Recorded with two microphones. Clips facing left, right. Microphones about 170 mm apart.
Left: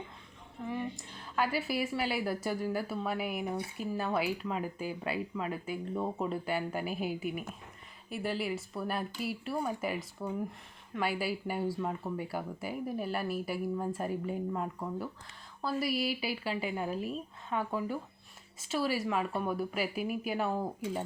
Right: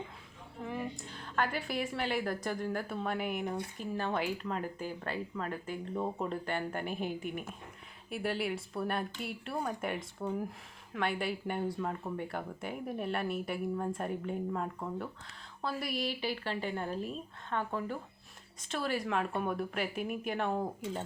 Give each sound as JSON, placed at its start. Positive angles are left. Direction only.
{"t": 0.6, "sound": "a woman's voice", "side_deg": 0}